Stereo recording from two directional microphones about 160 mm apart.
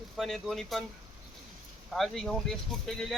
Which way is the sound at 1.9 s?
Centre (ahead or behind).